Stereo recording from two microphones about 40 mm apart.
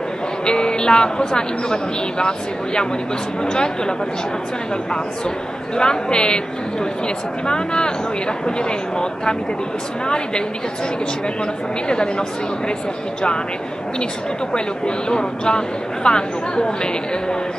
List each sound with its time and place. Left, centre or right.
0.5 s speech: left
5.8 s speech: left
11.9 s speech: left
14.5 s speech: left